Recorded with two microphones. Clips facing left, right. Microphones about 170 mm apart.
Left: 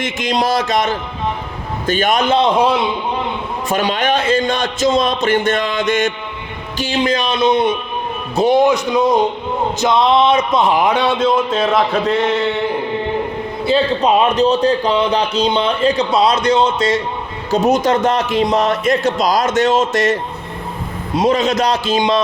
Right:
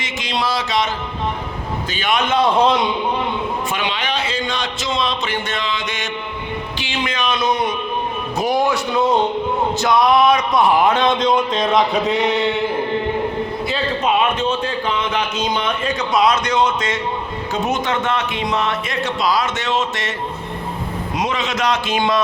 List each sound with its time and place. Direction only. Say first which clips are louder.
0.0 s a man's voice: left 5 dB; 50° left (ahead or behind); by 2.5 s 30° left (ahead or behind)
2.6 s speech: left 1 dB; 10° left (ahead or behind)
3.7 s a man's voice: left 6 dB; 40° left (ahead or behind)
6.7 s a man's voice: left 10 dB; 40° left (ahead or behind); by 12.5 s centre (ahead or behind)
13.7 s a man's voice: left 8 dB; 35° left (ahead or behind)
21.2 s a man's voice: left 8 dB; 40° left (ahead or behind)